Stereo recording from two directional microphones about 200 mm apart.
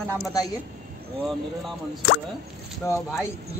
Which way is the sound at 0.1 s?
20° left (ahead or behind).